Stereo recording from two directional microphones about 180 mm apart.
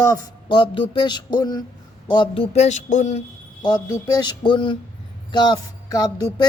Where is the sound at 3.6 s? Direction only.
20° left (ahead or behind).